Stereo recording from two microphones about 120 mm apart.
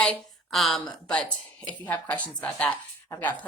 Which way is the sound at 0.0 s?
Centre (ahead or behind).